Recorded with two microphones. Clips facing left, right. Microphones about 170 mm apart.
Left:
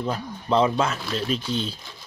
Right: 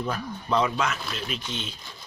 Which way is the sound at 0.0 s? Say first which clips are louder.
Left 2 dB; 25° left (ahead or behind).